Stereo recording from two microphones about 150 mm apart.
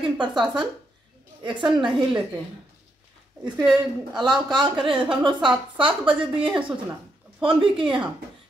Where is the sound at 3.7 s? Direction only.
30° right (ahead or behind).